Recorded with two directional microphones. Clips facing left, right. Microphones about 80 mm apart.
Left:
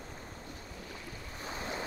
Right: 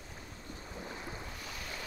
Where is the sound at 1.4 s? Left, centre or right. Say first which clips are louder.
Left 5 dB; left.